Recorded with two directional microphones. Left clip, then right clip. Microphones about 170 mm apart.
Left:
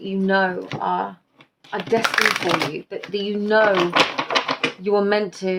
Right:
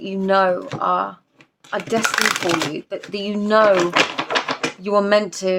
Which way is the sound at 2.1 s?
20° right (ahead or behind).